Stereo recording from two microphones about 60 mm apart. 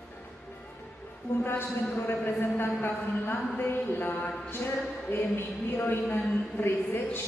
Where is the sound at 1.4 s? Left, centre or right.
Left.